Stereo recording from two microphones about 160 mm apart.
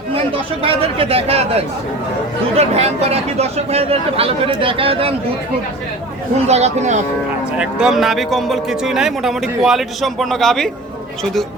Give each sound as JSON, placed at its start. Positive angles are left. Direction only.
{"t": 0.1, "sound": "speech", "side_deg": -35}
{"t": 6.5, "sound": "speech", "side_deg": -45}
{"t": 7.6, "sound": "a man's voice", "side_deg": -5}